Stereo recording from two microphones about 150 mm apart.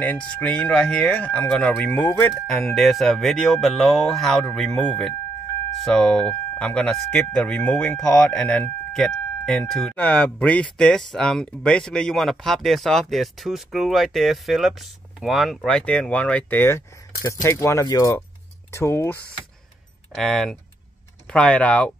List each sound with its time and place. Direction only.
0.0 s speech: 10° left (ahead or behind)
20.2 s speech: 5° left (ahead or behind)